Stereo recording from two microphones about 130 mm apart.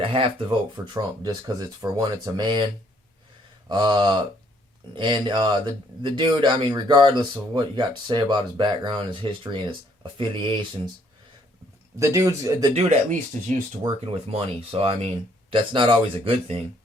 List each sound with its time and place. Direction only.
0.0 s speech: 45° right (ahead or behind)
0.9 s speech: 30° right (ahead or behind)
3.7 s speech: 35° right (ahead or behind)
11.9 s speech: 25° right (ahead or behind)
12.7 s speech: 55° right (ahead or behind)
13.8 s speech: 35° right (ahead or behind)
14.3 s speech: 50° right (ahead or behind)